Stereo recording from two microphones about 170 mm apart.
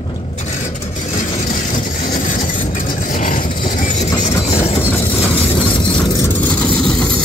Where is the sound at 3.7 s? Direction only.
45° left (ahead or behind).